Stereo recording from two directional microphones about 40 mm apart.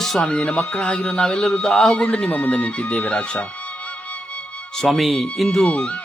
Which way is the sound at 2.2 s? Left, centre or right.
Left.